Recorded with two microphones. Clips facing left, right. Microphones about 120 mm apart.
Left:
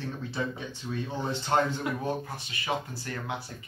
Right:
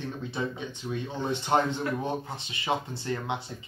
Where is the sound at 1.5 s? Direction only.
15° right (ahead or behind).